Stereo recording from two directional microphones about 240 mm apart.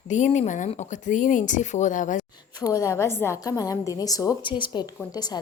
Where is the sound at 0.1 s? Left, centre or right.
Left.